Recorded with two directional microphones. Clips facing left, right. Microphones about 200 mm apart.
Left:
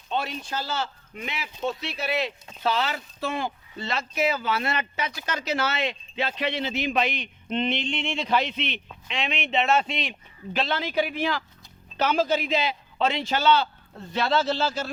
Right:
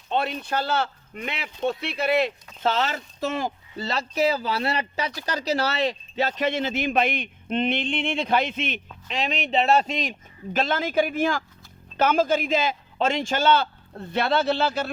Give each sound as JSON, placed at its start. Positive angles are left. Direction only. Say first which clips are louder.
{"t": 0.1, "sound": "speech", "louder": "right 4 dB", "side_deg": -60}